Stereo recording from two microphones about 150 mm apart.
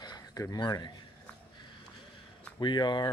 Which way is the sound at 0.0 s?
25° left (ahead or behind).